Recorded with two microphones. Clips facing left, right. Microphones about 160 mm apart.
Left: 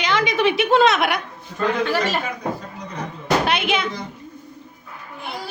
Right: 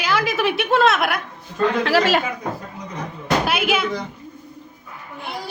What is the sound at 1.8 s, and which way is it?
Speech, 90° right.